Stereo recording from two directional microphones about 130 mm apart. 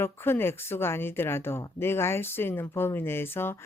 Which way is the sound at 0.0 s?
20° left (ahead or behind).